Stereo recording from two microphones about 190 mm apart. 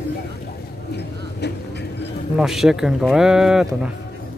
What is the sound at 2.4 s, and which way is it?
Speech, centre (ahead or behind).